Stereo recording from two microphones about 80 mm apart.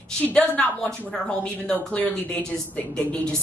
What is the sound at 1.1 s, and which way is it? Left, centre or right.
A woman's voice, centre.